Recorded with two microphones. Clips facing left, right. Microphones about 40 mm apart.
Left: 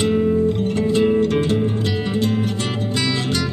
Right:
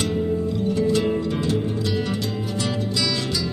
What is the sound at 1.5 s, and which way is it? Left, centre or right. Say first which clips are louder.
Music: left 3 dB; left.